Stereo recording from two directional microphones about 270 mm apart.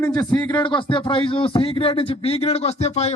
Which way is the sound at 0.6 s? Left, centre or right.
Centre.